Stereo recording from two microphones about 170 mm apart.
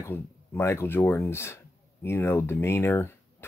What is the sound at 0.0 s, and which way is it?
Speech, 15° left (ahead or behind).